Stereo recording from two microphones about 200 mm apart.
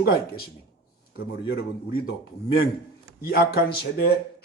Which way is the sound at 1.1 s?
50° left (ahead or behind).